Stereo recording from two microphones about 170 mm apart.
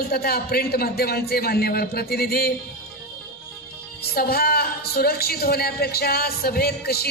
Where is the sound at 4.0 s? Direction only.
65° left (ahead or behind).